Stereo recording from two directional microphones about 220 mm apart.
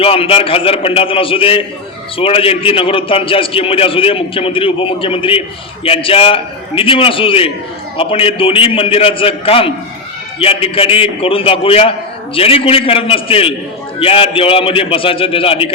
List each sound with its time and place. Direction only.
0.0 s a man's voice: 25° left (ahead or behind)